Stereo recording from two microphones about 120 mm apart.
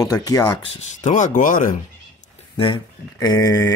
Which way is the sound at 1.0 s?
90° left.